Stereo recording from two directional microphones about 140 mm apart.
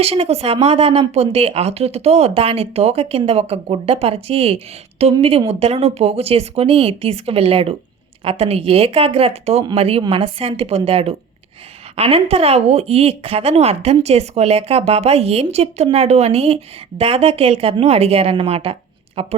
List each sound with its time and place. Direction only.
0.0 s speech: 45° right (ahead or behind)